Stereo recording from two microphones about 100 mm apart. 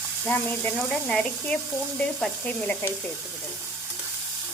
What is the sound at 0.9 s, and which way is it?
Sizzle, 10° left (ahead or behind).